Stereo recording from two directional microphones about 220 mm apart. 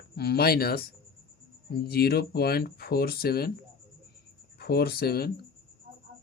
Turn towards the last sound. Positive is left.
turn(degrees=45)  # may be behind; listen again after turning